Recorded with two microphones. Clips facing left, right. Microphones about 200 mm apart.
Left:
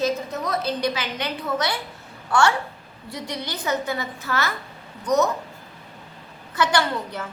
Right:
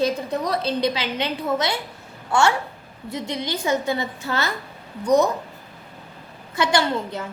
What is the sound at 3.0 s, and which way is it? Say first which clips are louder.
A woman's voice: right 4 dB; 25° right (ahead or behind).